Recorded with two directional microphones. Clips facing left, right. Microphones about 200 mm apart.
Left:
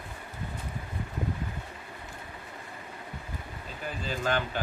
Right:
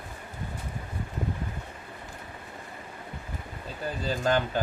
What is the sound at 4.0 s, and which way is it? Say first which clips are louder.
Speech: right 4 dB; 40° right (ahead or behind).